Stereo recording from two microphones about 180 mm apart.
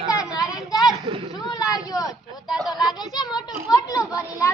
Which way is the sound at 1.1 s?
30° right (ahead or behind).